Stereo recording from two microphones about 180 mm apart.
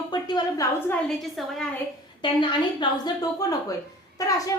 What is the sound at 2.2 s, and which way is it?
A woman's voice, 25° left (ahead or behind).